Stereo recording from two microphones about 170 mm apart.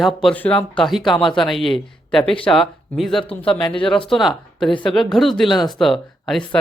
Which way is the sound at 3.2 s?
30° left (ahead or behind).